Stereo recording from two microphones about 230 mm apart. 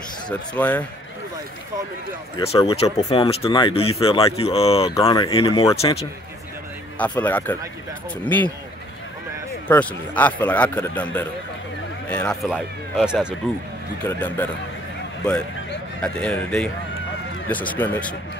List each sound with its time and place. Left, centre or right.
0.3 s a man's voice: centre
2.3 s speech: left
7.0 s a man's voice: centre
9.7 s a man's voice: centre
14.0 s a man's voice: centre
16.0 s a man's voice: centre